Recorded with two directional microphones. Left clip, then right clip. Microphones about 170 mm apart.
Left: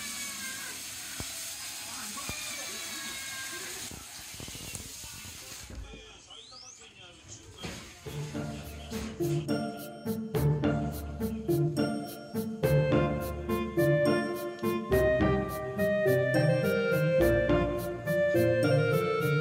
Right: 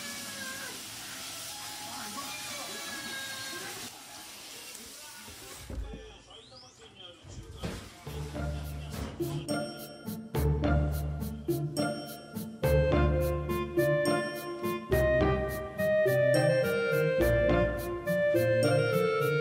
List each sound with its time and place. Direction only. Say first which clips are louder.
9.5 s music: left 1 dB; centre (ahead or behind)